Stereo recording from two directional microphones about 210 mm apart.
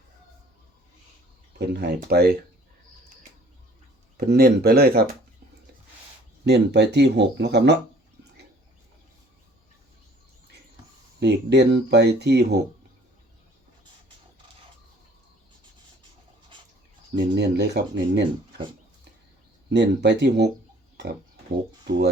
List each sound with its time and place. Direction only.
1.5 s speech: 55° right (ahead or behind)
4.2 s speech: 50° right (ahead or behind)
6.4 s speech: 55° right (ahead or behind)
11.2 s speech: 55° right (ahead or behind)
17.2 s speech: 50° right (ahead or behind)
19.7 s speech: 55° right (ahead or behind)
20.9 s oink: 55° right (ahead or behind)